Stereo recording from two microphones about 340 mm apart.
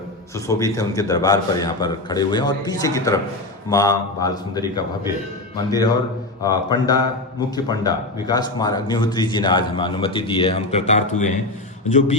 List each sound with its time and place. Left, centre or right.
0.3 s a man's voice: centre